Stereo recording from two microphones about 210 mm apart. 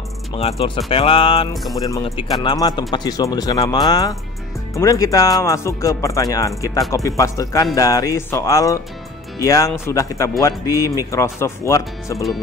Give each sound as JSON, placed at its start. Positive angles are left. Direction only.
{"t": 0.3, "sound": "speech", "side_deg": 30}